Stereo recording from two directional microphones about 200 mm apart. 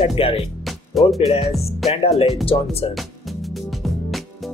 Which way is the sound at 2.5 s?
25° left (ahead or behind).